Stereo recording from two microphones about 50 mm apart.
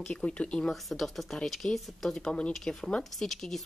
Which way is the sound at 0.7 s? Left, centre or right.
Centre.